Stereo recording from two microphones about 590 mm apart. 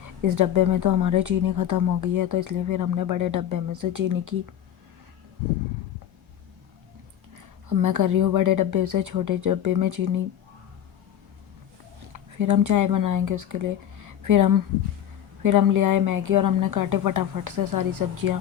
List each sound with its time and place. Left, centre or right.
0.2 s speech: right
7.3 s a woman's voice: right
12.4 s a woman's voice: right